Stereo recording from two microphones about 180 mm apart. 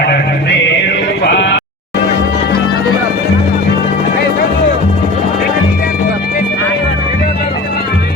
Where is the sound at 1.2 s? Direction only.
75° left (ahead or behind).